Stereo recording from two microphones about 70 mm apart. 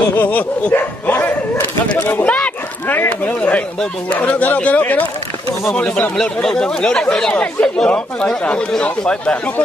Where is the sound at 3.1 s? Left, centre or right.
Left.